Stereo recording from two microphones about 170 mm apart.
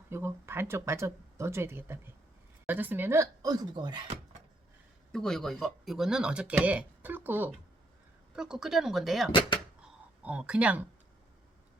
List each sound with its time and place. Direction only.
0.1 s speech: 15° right (ahead or behind)
5.1 s speech: centre (ahead or behind)